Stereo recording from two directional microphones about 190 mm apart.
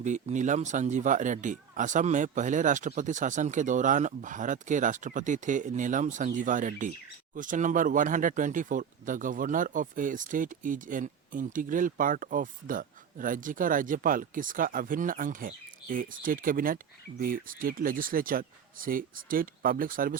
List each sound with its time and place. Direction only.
0.0 s speech: 40° right (ahead or behind)